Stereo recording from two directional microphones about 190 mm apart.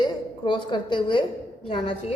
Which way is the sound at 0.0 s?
25° left (ahead or behind).